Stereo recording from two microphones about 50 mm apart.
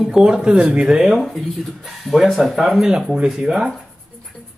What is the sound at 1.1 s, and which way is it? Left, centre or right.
A man's voice, centre.